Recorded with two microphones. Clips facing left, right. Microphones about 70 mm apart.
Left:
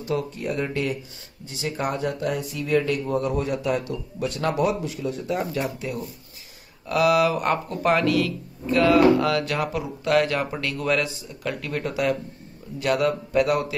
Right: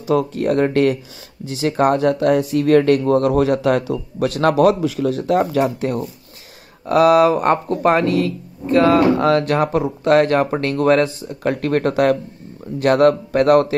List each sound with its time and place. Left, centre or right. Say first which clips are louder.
0.1 s speech: right 10 dB; right
6.9 s a man's voice: right 7 dB; right